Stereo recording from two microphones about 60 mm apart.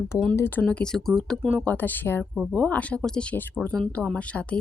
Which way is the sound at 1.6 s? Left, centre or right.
Left.